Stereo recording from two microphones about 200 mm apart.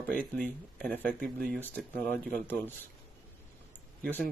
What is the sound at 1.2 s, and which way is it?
Speech, 50° right (ahead or behind).